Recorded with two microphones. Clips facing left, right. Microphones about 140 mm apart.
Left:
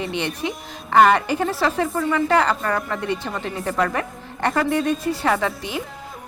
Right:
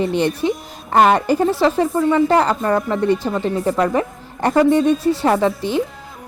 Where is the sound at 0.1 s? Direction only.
40° right (ahead or behind).